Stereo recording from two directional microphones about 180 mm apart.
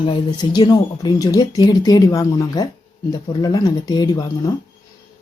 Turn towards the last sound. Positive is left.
turn(degrees=20)  # may be behind; listen again after turning